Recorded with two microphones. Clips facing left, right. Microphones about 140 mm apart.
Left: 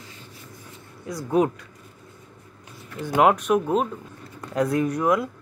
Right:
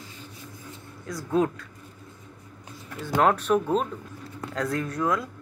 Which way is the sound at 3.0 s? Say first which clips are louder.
Left 3 dB; 10° left (ahead or behind).